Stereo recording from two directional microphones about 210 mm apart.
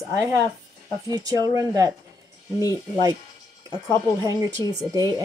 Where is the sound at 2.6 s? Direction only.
20° left (ahead or behind).